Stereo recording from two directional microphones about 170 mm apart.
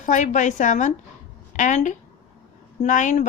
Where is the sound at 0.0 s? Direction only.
45° left (ahead or behind).